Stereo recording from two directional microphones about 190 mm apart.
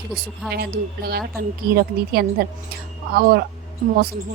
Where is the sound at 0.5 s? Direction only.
55° right (ahead or behind).